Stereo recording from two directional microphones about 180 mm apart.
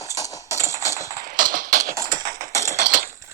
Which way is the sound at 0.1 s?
20° left (ahead or behind).